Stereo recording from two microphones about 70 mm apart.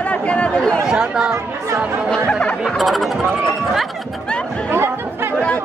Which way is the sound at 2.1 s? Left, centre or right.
Centre.